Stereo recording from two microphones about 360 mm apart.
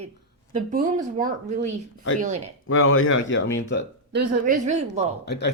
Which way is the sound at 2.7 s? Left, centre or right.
Left.